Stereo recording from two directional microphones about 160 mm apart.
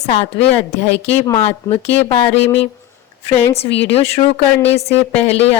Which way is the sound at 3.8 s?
40° left (ahead or behind).